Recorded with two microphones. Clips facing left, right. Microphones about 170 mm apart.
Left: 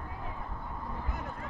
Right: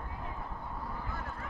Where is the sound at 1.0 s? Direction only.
20° left (ahead or behind).